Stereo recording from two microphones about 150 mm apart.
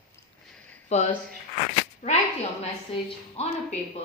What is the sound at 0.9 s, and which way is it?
Speech, 50° left (ahead or behind).